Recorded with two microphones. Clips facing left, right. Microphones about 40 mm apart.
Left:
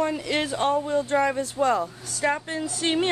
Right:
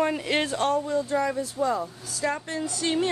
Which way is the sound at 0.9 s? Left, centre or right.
Left.